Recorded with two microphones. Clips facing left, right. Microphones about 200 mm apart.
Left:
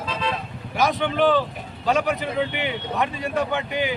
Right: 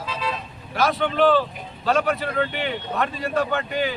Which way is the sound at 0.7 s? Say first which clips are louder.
Even; 15° left (ahead or behind).